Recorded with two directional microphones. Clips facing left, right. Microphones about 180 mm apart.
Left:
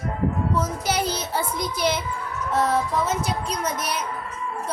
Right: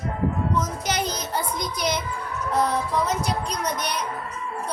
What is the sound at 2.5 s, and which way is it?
Speech, 5° left (ahead or behind).